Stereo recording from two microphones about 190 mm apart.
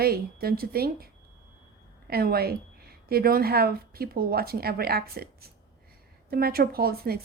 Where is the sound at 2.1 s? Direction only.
55° right (ahead or behind).